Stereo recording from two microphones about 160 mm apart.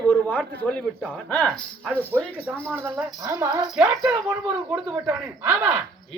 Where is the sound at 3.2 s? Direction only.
20° right (ahead or behind).